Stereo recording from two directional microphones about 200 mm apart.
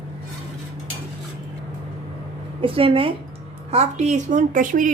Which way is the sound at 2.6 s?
25° right (ahead or behind).